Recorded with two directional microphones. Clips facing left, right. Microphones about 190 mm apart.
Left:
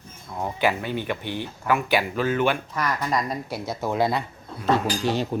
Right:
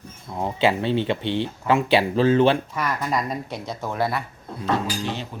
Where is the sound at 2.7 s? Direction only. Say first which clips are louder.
Even; 5° right (ahead or behind); by 4.2 s 15° left (ahead or behind).